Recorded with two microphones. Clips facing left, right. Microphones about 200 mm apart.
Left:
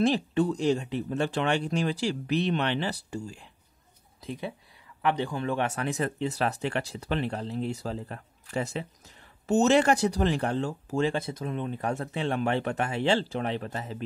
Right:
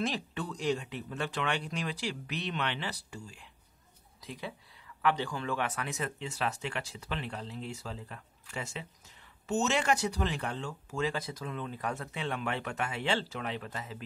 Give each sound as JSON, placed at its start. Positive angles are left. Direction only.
{"t": 0.0, "sound": "speech", "side_deg": 25}
{"t": 7.1, "sound": "speech", "side_deg": 50}